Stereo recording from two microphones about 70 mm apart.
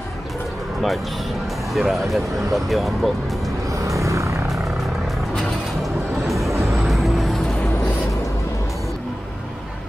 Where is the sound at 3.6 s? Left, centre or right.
Right.